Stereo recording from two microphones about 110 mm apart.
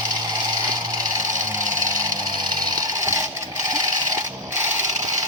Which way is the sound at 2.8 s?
25° right (ahead or behind).